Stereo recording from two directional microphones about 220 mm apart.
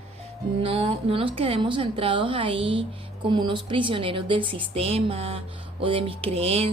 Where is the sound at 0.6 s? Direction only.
25° right (ahead or behind).